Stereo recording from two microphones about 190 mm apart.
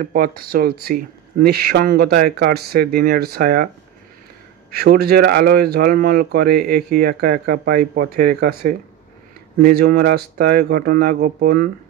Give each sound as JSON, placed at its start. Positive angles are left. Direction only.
{"t": 0.0, "sound": "speech", "side_deg": -50}
{"t": 4.6, "sound": "speech", "side_deg": -55}